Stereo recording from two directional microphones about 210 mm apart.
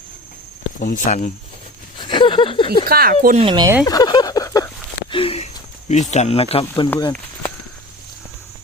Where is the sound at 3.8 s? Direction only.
20° left (ahead or behind).